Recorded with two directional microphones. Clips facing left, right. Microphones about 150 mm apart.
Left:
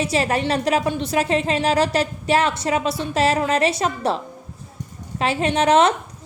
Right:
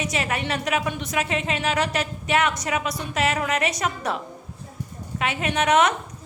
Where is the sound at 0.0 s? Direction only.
35° left (ahead or behind).